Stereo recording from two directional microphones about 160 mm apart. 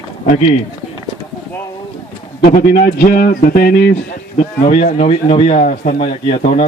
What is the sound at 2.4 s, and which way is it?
Speech, 70° left (ahead or behind).